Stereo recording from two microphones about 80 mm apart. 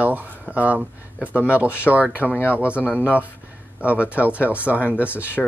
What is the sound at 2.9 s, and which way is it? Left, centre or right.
Speech, centre.